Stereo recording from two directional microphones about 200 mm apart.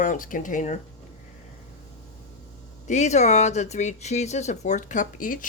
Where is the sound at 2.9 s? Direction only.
35° left (ahead or behind).